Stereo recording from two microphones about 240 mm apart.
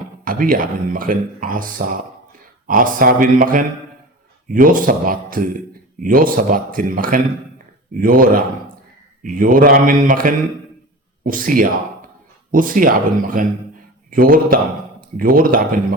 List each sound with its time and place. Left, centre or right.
0.3 s a man's voice: right